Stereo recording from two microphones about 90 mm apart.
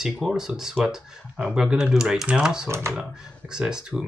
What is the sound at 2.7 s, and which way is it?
Speech, 30° right (ahead or behind).